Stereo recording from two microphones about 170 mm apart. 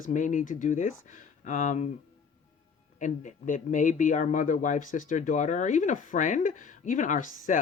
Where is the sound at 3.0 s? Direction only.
50° left (ahead or behind).